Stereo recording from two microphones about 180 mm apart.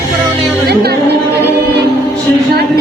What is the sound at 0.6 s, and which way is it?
Speech, 65° right (ahead or behind).